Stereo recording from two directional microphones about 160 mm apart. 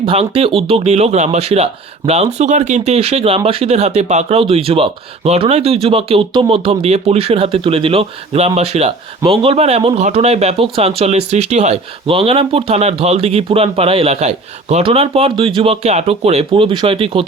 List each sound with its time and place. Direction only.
0.0 s speech: 35° right (ahead or behind)